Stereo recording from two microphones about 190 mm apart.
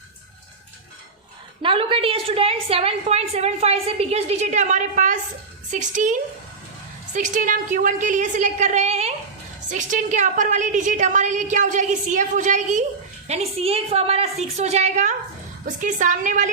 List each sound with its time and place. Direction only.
1.6 s a woman's voice: 30° right (ahead or behind)